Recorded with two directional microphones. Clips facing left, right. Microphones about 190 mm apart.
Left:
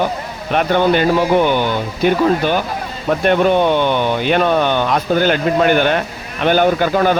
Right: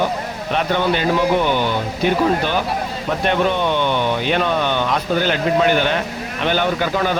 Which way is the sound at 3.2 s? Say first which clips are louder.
Left 5 dB; 45° left (ahead or behind).